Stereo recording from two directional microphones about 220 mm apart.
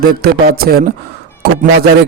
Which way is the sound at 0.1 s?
45° right (ahead or behind).